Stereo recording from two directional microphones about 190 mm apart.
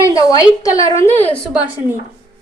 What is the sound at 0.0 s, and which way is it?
A woman's voice, 15° left (ahead or behind).